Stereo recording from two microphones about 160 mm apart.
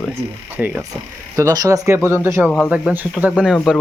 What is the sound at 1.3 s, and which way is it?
Speech, 20° right (ahead or behind).